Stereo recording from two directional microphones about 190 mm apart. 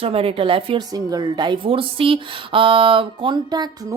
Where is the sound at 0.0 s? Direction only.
30° right (ahead or behind).